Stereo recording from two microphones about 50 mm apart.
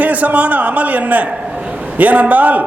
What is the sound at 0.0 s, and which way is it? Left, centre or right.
A man's voice, right.